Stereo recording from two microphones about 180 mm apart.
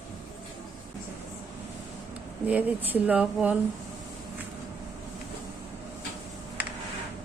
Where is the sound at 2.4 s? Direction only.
10° right (ahead or behind).